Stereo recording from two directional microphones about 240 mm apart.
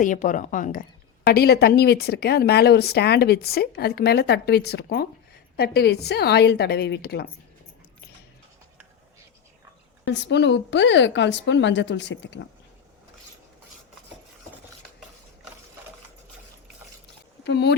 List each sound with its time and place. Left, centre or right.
0.0 s a woman's voice: left
10.1 s a woman's voice: left
17.4 s speech: left